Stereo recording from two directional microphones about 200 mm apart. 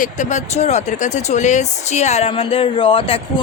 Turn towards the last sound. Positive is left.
turn(degrees=25)  # may be behind; listen again after turning